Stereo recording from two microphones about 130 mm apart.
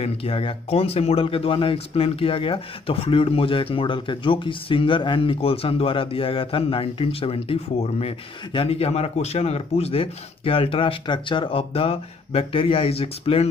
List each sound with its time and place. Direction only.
0.0 s speech: 45° left (ahead or behind)